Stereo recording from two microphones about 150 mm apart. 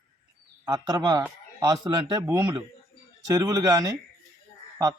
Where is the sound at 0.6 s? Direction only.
25° right (ahead or behind).